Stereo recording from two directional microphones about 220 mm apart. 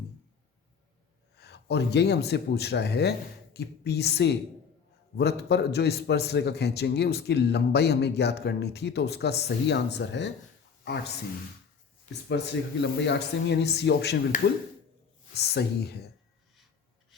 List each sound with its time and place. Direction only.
1.4 s a man's voice: 50° left (ahead or behind)
12.3 s a man's voice: 50° left (ahead or behind)
15.4 s a man's voice: 45° left (ahead or behind)